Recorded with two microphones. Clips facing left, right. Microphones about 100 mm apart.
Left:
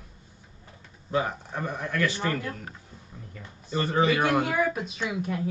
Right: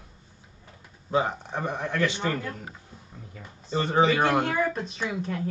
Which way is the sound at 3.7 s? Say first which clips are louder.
Right 2 dB; 20° right (ahead or behind).